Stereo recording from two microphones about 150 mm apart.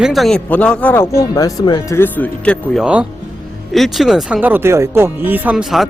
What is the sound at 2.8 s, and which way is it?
Speech, 5° right (ahead or behind).